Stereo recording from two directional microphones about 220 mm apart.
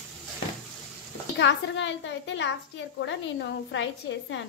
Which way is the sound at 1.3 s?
55° left (ahead or behind).